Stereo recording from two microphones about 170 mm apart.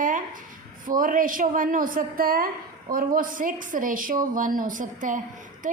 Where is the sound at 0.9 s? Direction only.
55° right (ahead or behind).